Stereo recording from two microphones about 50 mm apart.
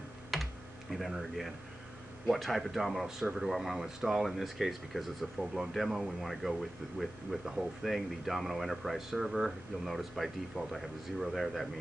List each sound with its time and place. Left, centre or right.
0.3 s computer keyboard: centre
2.2 s speech: centre